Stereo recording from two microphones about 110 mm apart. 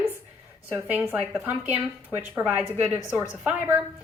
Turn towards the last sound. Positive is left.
turn(degrees=-15)  # may be behind; listen again after turning